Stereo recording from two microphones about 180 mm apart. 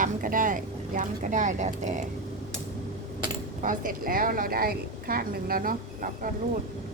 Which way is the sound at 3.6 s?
50° right (ahead or behind).